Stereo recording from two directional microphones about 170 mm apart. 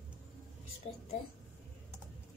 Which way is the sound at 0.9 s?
40° left (ahead or behind).